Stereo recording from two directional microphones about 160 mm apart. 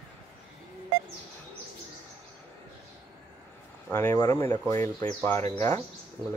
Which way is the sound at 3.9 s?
15° left (ahead or behind).